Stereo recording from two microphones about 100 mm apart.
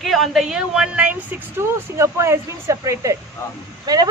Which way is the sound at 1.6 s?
30° right (ahead or behind).